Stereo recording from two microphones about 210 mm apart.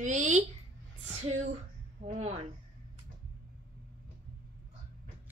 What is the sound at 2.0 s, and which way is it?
Speech, 30° right (ahead or behind).